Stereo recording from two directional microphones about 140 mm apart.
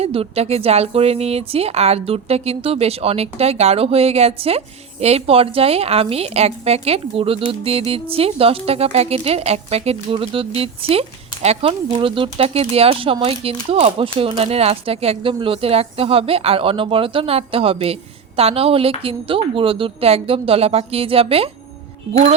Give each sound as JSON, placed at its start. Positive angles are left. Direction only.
{"t": 0.0, "sound": "a woman's voice", "side_deg": -45}